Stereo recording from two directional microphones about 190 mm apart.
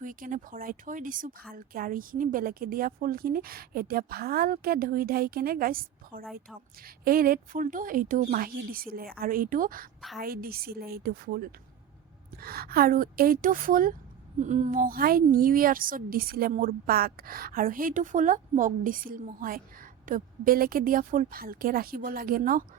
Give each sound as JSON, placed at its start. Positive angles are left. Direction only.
{"t": 0.0, "sound": "a woman's voice", "side_deg": -45}